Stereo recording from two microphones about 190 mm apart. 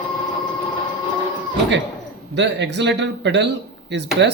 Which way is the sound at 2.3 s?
70° right (ahead or behind).